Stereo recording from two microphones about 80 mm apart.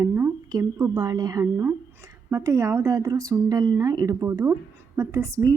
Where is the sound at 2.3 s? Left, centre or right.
Right.